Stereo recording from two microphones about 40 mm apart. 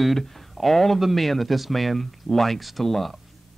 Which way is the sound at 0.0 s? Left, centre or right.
Centre.